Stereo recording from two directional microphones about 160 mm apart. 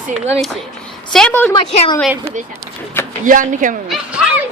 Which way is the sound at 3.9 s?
5° right (ahead or behind).